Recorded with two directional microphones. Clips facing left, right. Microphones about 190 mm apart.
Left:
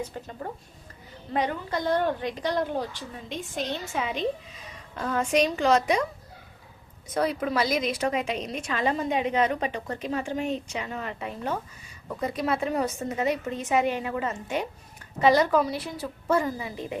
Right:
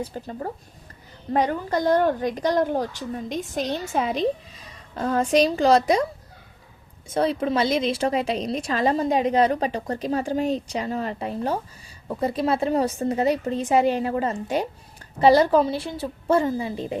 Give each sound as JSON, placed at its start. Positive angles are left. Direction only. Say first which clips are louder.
{"t": 0.0, "sound": "a woman's voice", "louder": "right 4 dB", "side_deg": -40}
{"t": 7.1, "sound": "a woman's voice", "louder": "right 4 dB", "side_deg": -25}